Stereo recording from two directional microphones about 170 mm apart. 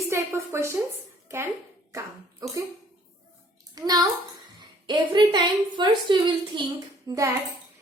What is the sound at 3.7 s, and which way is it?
A child's voice, 25° right (ahead or behind).